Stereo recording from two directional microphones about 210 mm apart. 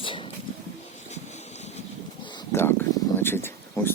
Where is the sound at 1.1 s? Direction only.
35° left (ahead or behind).